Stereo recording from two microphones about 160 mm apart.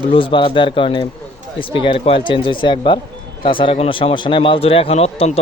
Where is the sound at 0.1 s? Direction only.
35° left (ahead or behind).